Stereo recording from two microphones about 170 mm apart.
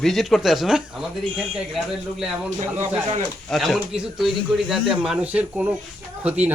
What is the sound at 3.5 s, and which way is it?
A man's voice, centre (ahead or behind).